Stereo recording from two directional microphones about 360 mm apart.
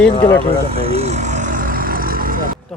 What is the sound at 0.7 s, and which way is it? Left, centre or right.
Vehicle, centre.